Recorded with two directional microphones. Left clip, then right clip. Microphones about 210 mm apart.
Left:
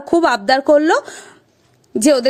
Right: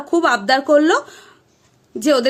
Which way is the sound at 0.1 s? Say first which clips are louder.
Left 2 dB; 35° left (ahead or behind).